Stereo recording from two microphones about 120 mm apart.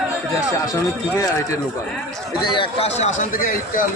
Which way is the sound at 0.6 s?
30° left (ahead or behind).